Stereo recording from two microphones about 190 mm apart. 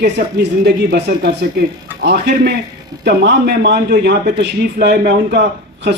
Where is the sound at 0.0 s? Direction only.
60° right (ahead or behind).